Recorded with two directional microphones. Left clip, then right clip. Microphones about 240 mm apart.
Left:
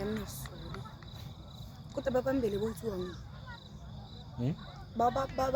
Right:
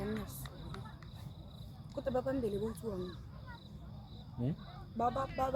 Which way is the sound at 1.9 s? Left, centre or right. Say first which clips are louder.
Left 5 dB; left.